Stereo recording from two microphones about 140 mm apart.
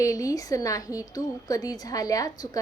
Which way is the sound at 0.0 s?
25° left (ahead or behind).